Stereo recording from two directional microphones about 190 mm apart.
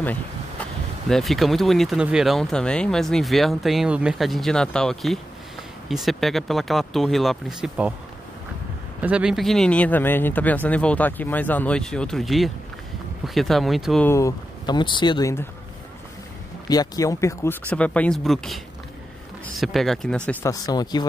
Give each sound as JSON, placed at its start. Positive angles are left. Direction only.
{"t": 1.0, "sound": "speech", "side_deg": 0}
{"t": 9.0, "sound": "speech", "side_deg": -5}
{"t": 14.0, "sound": "speech", "side_deg": 15}
{"t": 16.6, "sound": "speech", "side_deg": 20}
{"t": 20.2, "sound": "speech", "side_deg": 15}